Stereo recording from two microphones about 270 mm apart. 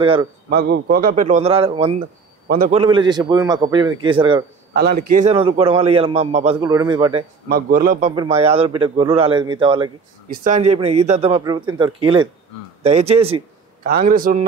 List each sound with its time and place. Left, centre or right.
0.0 s a man's voice: centre
0.5 s a man's voice: right
2.4 s a man's voice: right
2.8 s a man's voice: centre
5.0 s a man's voice: right
7.4 s a man's voice: right
8.1 s a man's voice: centre
10.3 s a man's voice: right
13.8 s a man's voice: right